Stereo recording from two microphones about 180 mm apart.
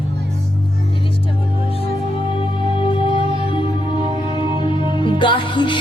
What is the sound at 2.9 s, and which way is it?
Music, 25° left (ahead or behind).